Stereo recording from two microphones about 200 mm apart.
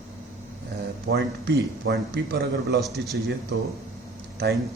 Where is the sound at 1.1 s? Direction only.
55° right (ahead or behind).